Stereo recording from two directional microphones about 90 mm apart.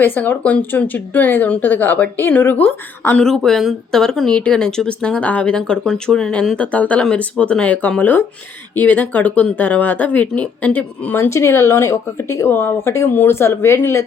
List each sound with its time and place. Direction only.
0.0 s speech: 20° left (ahead or behind)
3.2 s speech: 5° left (ahead or behind)
6.6 s speech: 15° left (ahead or behind)